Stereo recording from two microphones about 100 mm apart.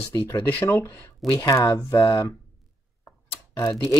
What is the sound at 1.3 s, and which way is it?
Speech, 40° left (ahead or behind).